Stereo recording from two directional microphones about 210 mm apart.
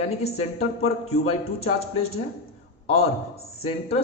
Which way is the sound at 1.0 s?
90° left.